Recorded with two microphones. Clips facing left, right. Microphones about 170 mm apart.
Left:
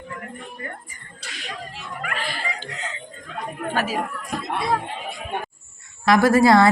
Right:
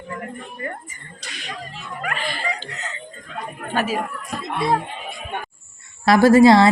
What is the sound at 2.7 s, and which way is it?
Chuckle, 45° right (ahead or behind).